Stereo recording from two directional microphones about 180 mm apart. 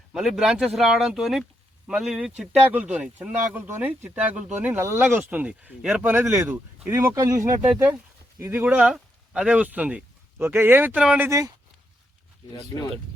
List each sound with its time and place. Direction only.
0.1 s speech: centre (ahead or behind)
11.3 s speech: 20° right (ahead or behind)